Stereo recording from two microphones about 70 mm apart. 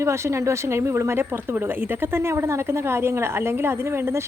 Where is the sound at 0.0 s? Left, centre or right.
Right.